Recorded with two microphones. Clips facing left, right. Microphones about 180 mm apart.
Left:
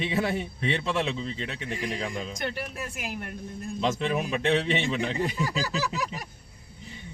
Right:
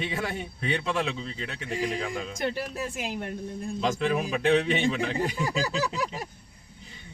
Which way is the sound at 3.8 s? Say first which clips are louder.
Even; centre (ahead or behind).